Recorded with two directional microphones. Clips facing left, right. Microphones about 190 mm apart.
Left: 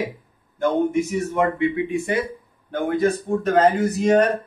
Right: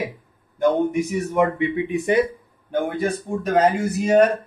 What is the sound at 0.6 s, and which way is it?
Speech, 15° right (ahead or behind).